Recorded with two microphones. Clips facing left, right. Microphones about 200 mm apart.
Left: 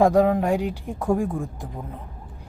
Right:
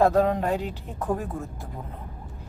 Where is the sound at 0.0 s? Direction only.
15° left (ahead or behind).